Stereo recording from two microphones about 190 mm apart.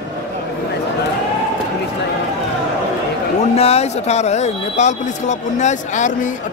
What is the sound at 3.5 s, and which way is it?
Speech, 35° left (ahead or behind).